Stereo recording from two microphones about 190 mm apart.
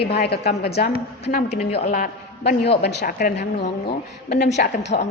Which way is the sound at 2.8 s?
60° left (ahead or behind).